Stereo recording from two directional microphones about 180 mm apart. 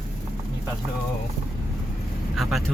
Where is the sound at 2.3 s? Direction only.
Centre (ahead or behind).